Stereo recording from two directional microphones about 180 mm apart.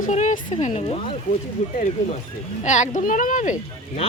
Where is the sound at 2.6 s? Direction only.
40° left (ahead or behind).